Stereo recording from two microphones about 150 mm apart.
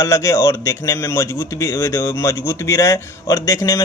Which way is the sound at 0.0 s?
20° left (ahead or behind).